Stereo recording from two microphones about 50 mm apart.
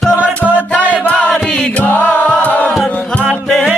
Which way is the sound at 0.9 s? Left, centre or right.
Left.